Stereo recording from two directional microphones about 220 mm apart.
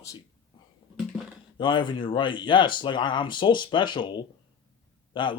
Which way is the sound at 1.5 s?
20° left (ahead or behind).